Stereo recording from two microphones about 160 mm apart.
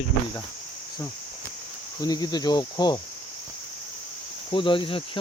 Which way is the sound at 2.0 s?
25° left (ahead or behind).